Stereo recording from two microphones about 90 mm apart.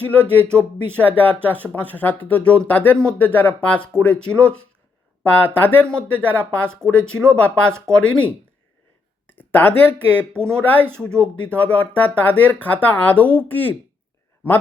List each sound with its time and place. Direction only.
0.0 s speech: 15° left (ahead or behind)
9.4 s speech: 20° left (ahead or behind)